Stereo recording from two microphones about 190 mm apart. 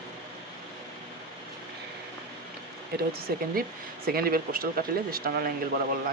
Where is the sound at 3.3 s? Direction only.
55° right (ahead or behind).